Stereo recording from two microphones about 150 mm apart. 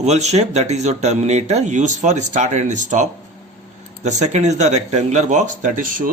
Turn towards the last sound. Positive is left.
turn(degrees=-60)  # may be behind; listen again after turning